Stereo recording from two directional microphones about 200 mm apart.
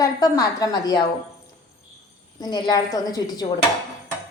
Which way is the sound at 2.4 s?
20° left (ahead or behind).